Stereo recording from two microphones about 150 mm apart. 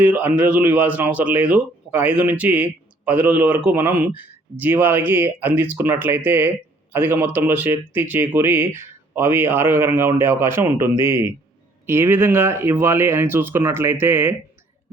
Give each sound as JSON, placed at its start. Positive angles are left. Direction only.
{"t": 0.0, "sound": "speech", "side_deg": -10}